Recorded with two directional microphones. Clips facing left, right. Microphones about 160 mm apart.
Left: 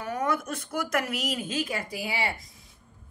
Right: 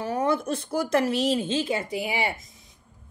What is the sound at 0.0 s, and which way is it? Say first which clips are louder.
Speech: right 4 dB; 30° right (ahead or behind).